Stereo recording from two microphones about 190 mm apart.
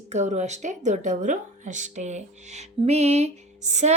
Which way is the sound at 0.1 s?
35° right (ahead or behind).